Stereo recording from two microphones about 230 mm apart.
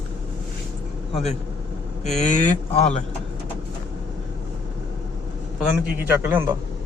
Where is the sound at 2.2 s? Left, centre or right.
Left.